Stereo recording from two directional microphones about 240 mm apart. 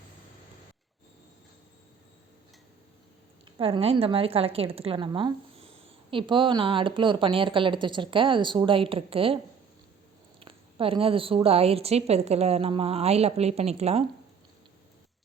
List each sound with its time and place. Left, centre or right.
3.6 s a woman's voice: right
10.4 s a woman's voice: right